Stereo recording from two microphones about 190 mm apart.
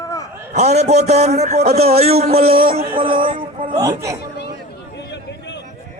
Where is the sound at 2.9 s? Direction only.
25° right (ahead or behind).